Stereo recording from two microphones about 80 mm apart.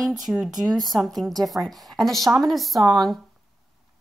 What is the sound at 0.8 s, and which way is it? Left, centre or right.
A woman's voice, centre.